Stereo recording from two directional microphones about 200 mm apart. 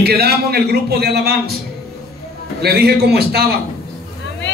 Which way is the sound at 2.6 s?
55° right (ahead or behind).